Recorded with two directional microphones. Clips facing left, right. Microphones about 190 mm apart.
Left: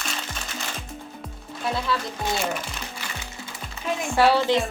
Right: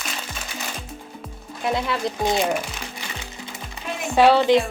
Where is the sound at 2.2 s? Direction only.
15° right (ahead or behind).